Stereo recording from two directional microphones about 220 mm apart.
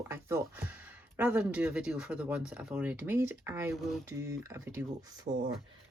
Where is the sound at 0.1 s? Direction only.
10° right (ahead or behind).